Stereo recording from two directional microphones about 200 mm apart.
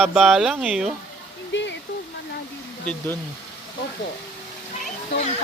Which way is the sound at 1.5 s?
65° left (ahead or behind).